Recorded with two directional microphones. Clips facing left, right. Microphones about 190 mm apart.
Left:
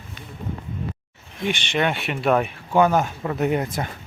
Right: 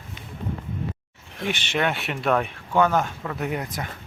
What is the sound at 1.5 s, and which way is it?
Speech, 5° right (ahead or behind).